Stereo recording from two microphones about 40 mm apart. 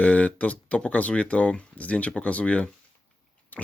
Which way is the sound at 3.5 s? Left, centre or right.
Left.